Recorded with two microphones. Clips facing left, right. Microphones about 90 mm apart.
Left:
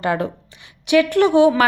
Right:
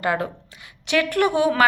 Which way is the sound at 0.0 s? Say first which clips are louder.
Left 2 dB; 25° left (ahead or behind).